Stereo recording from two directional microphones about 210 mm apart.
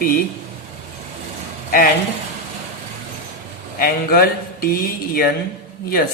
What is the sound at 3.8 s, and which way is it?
A man's voice, 45° left (ahead or behind).